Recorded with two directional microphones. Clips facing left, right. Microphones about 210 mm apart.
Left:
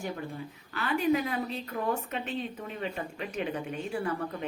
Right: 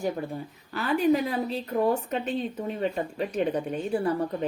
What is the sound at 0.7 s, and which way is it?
A woman's voice, 40° right (ahead or behind).